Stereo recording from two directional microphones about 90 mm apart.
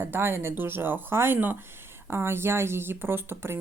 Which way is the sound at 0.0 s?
25° right (ahead or behind).